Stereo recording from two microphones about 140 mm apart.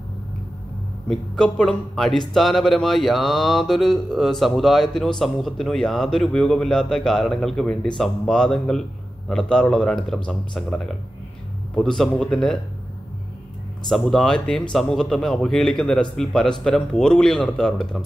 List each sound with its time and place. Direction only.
1.0 s speech: 5° left (ahead or behind)
13.8 s speech: centre (ahead or behind)